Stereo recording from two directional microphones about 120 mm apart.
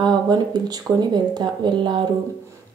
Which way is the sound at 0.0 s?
35° right (ahead or behind).